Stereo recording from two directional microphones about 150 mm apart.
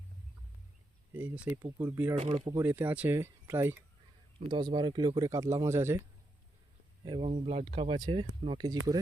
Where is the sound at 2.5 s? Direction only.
15° right (ahead or behind).